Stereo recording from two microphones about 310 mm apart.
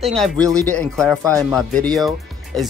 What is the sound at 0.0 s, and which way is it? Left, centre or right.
Speech, centre.